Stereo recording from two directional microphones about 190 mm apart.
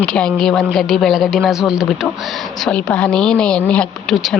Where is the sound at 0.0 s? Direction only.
5° left (ahead or behind).